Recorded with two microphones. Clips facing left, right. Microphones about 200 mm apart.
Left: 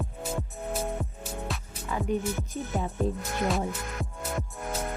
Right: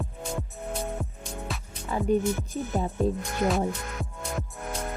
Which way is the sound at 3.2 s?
Centre (ahead or behind).